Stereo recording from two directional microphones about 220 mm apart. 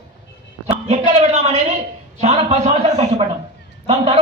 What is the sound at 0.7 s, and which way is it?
A man's voice, 30° right (ahead or behind).